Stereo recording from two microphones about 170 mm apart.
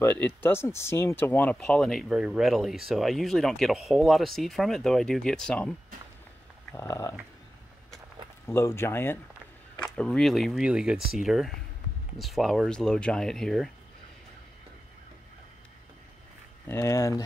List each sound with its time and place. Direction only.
0.0 s speech: 15° left (ahead or behind)
6.7 s speech: 15° left (ahead or behind)
8.5 s speech: 15° left (ahead or behind)
16.6 s speech: 15° left (ahead or behind)